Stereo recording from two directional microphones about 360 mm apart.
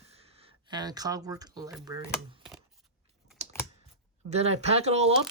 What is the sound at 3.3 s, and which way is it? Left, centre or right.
Typing, centre.